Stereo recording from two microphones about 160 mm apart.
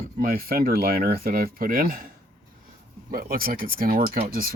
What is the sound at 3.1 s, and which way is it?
Speech, 65° right (ahead or behind).